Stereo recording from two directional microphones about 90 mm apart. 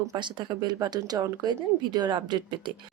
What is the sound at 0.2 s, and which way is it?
Speech, 60° right (ahead or behind).